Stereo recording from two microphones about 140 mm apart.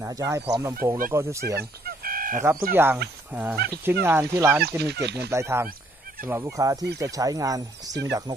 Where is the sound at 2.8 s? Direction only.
15° right (ahead or behind).